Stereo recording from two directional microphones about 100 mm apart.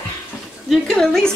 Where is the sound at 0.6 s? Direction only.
5° left (ahead or behind).